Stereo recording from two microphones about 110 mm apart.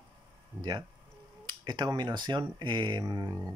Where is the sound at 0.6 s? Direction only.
40° right (ahead or behind).